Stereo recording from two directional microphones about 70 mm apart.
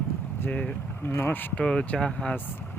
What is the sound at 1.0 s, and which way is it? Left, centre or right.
Speech, left.